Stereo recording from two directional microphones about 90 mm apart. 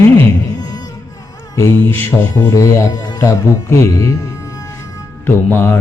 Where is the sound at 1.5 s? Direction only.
35° left (ahead or behind).